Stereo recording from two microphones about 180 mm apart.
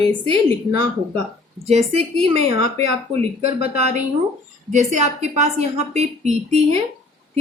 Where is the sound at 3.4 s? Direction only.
60° left (ahead or behind).